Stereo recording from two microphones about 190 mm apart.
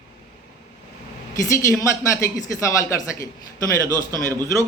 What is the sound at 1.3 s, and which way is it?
Speech, 15° left (ahead or behind).